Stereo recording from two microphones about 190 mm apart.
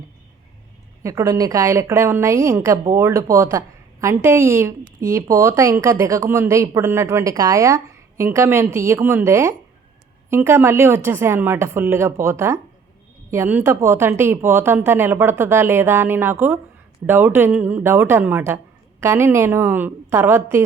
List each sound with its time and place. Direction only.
1.0 s speech: 15° right (ahead or behind)